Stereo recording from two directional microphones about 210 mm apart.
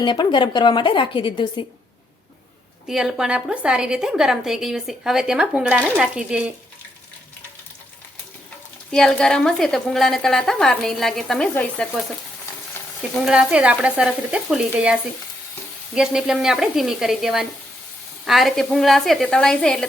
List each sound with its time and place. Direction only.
0.0 s a woman's voice: 20° left (ahead or behind)
2.8 s a woman's voice: centre (ahead or behind)
8.9 s a woman's voice: 5° left (ahead or behind)
16.0 s a woman's voice: 5° right (ahead or behind)